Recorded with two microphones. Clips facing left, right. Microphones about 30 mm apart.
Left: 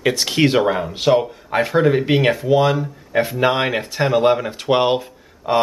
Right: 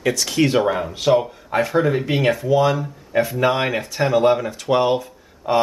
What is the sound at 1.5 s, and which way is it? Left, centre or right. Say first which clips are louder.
Speech: left 2 dB; left.